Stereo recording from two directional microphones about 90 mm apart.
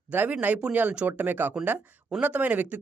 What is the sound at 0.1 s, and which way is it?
Speech, 20° right (ahead or behind).